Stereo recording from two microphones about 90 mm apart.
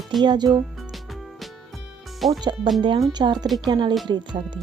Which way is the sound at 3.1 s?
55° right (ahead or behind).